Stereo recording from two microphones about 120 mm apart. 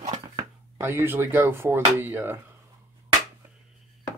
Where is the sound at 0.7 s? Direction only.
20° right (ahead or behind).